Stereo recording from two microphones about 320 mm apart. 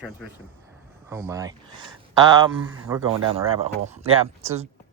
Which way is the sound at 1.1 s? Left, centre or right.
Centre.